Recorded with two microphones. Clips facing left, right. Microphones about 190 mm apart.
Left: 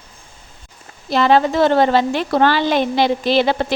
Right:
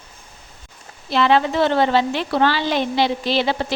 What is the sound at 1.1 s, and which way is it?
A woman's voice, 40° left (ahead or behind).